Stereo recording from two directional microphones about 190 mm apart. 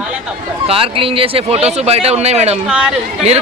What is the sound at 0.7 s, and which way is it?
Speech, 30° right (ahead or behind).